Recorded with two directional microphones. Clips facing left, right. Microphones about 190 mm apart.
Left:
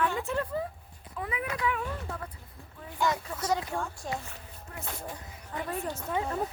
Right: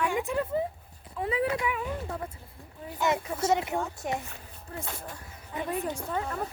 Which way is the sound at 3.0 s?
25° right (ahead or behind).